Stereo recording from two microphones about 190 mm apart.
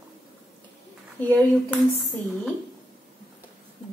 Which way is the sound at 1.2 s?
5° left (ahead or behind).